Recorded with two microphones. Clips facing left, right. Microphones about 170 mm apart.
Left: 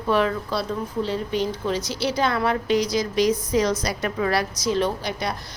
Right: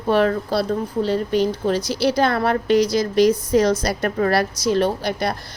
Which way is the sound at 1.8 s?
10° right (ahead or behind).